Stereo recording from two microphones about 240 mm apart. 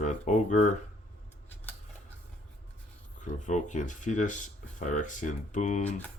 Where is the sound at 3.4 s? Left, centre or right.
Left.